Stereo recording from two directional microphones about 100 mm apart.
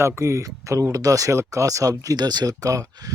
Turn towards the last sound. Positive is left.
turn(degrees=-35)  # may be behind; listen again after turning